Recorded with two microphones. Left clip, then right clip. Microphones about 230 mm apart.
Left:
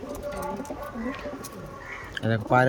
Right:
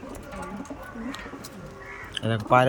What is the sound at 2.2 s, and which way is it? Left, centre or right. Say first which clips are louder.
Speech: right 2 dB; centre.